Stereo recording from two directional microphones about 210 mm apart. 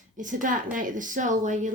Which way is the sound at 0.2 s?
40° right (ahead or behind).